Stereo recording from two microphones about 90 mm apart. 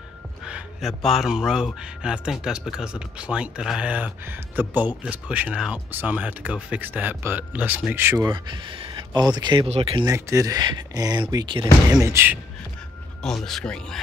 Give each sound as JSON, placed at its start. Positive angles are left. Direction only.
{"t": 0.4, "sound": "speech", "side_deg": -10}
{"t": 8.3, "sound": "speech", "side_deg": -60}
{"t": 10.0, "sound": "speech", "side_deg": -35}
{"t": 11.9, "sound": "speech", "side_deg": -35}
{"t": 13.2, "sound": "a man's voice", "side_deg": 5}